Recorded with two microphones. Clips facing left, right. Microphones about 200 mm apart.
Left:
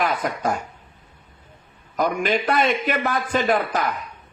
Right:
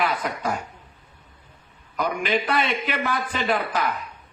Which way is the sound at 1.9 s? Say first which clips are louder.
Left 3 dB; 45° left (ahead or behind).